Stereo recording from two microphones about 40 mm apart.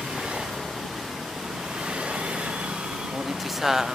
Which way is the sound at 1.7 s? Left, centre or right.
Right.